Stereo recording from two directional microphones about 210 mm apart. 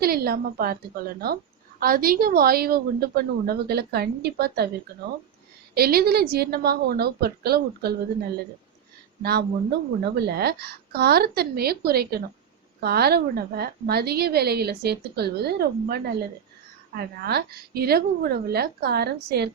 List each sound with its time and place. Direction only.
0.0 s a woman's voice: 45° right (ahead or behind)
5.7 s a woman's voice: 50° right (ahead or behind)
9.2 s a woman's voice: 50° right (ahead or behind)